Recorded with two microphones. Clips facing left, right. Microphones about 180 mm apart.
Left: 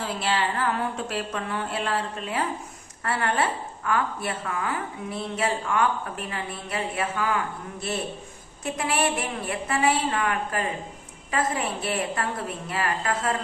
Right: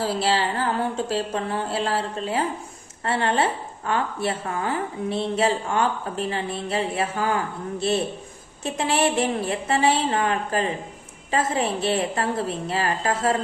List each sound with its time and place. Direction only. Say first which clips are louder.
0.0 s a woman's voice: right 4 dB; 30° right (ahead or behind)